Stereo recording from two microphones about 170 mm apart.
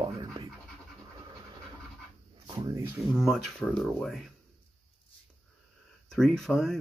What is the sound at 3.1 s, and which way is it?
Speech, centre (ahead or behind).